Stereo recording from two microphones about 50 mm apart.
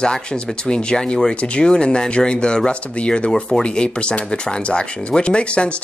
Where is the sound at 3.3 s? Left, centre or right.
Centre.